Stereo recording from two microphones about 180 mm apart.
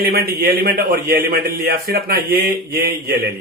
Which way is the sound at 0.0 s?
55° right (ahead or behind).